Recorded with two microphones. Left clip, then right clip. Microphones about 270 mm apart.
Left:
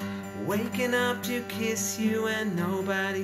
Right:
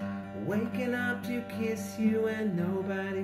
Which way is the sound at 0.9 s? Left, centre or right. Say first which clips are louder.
Left 6 dB; centre.